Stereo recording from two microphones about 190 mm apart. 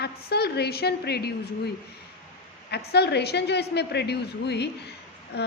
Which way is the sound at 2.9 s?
60° left (ahead or behind).